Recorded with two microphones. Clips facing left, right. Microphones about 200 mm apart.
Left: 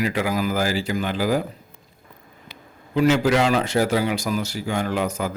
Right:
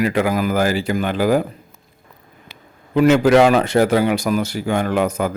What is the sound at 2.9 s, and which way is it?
A man's voice, 55° right (ahead or behind).